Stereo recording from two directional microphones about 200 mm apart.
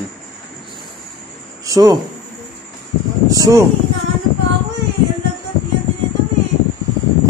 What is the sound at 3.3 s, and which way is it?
Speech, 15° right (ahead or behind).